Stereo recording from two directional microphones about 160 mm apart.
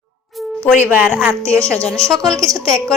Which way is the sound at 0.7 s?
10° right (ahead or behind).